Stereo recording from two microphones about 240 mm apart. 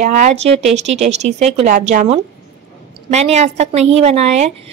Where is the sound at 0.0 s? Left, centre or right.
Right.